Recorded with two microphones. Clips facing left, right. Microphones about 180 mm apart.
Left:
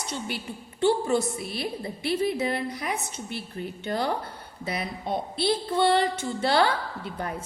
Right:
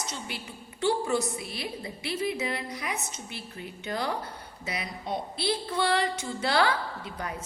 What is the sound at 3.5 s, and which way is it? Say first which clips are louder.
Speech: left 3 dB; 30° left (ahead or behind).